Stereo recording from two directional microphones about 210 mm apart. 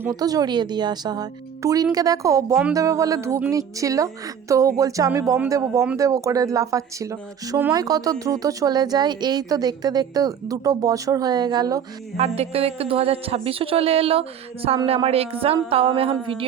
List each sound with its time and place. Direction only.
0.0 s speech: 15° right (ahead or behind)
12.1 s speech: 30° right (ahead or behind)